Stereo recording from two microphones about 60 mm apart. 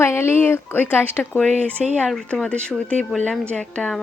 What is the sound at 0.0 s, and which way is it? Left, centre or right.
A woman's voice, left.